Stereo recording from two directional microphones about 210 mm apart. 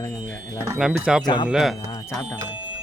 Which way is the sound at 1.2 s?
20° left (ahead or behind).